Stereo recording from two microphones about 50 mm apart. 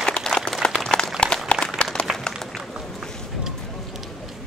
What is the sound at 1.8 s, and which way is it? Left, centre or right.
Applause, centre.